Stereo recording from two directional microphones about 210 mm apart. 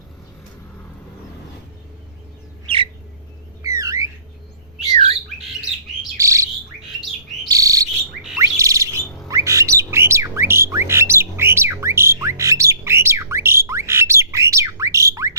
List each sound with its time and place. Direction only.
2.6 s bird: 25° right (ahead or behind)
3.6 s a sound: 15° right (ahead or behind)
6.1 s bird: 15° right (ahead or behind)